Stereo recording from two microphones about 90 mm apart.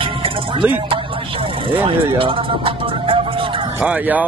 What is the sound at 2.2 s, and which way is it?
Music, 80° right.